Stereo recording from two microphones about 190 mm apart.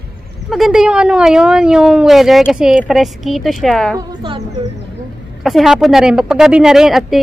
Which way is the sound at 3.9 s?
25° right (ahead or behind).